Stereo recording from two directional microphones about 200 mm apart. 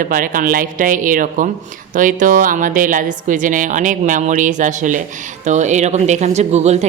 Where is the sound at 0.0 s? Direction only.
45° right (ahead or behind).